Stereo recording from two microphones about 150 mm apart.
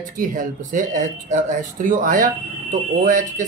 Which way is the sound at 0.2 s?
60° right (ahead or behind).